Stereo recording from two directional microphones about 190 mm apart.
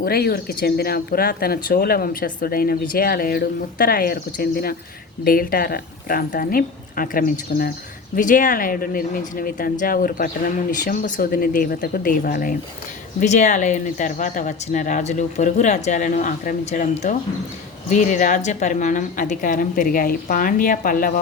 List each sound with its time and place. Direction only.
0.0 s speech: 55° left (ahead or behind)